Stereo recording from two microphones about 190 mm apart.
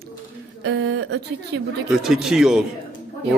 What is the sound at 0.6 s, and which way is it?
Speech, 65° right (ahead or behind).